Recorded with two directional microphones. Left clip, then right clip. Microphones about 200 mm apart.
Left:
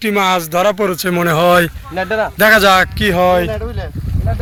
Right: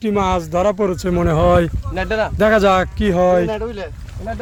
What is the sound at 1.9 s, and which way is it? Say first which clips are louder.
Speech: left 2 dB; 35° left (ahead or behind).